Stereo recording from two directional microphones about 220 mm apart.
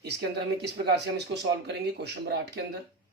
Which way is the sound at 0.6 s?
50° right (ahead or behind).